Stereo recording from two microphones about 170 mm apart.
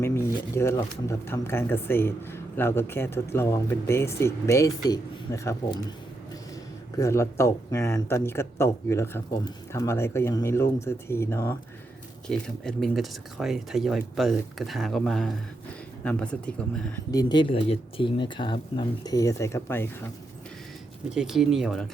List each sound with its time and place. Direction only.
0.0 s speech: 15° left (ahead or behind)
6.9 s speech: 15° left (ahead or behind)
12.3 s speech: centre (ahead or behind)
17.1 s speech: 25° left (ahead or behind)
21.1 s speech: 5° right (ahead or behind)